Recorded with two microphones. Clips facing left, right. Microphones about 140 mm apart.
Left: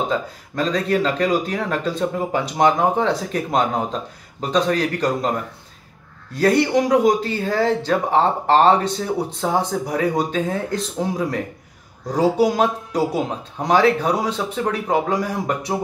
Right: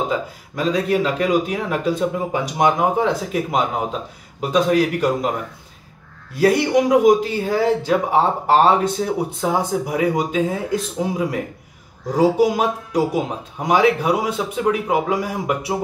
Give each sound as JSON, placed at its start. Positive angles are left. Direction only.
{"t": 0.1, "sound": "speech", "side_deg": -10}
{"t": 6.3, "sound": "speech", "side_deg": -10}